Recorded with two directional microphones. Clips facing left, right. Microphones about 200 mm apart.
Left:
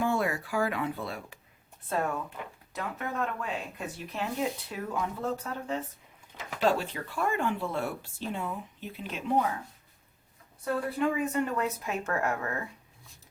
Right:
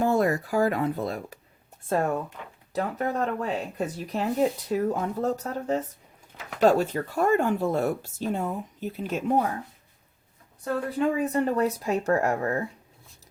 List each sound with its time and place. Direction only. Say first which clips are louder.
0.0 s speech: right 6 dB; 40° right (ahead or behind)
10.6 s speech: right 3 dB; 35° right (ahead or behind)